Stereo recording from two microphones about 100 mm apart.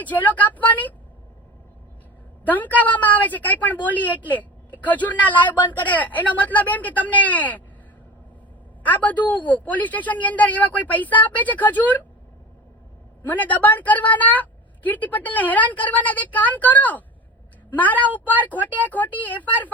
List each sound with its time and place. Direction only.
0.0 s a woman's voice: 15° left (ahead or behind)
2.4 s a woman's voice: 15° left (ahead or behind)
8.8 s a woman's voice: 15° left (ahead or behind)
13.2 s a woman's voice: 15° left (ahead or behind)